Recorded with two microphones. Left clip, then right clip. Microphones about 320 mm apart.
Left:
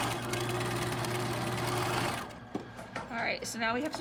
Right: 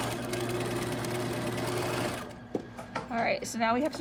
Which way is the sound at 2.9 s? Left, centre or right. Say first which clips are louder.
Right 4 dB; centre.